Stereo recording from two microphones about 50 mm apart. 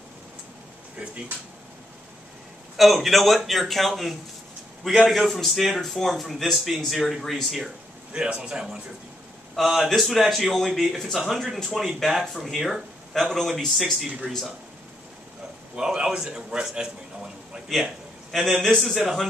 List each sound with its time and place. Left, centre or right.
2.8 s a man's voice: centre
8.1 s a man's voice: centre
9.6 s a man's voice: centre
15.7 s a man's voice: centre
17.7 s a man's voice: centre